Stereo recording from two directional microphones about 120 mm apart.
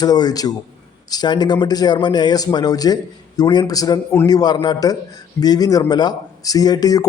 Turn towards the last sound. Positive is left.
turn(degrees=30)  # may be behind; listen again after turning